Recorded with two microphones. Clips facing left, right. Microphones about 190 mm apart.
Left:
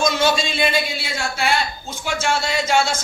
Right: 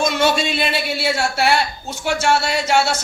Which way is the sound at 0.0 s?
60° right (ahead or behind).